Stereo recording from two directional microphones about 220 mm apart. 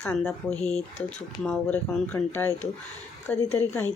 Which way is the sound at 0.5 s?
30° left (ahead or behind).